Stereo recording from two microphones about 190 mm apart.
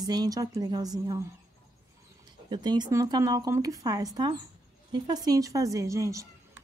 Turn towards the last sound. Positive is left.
turn(degrees=-15)  # may be behind; listen again after turning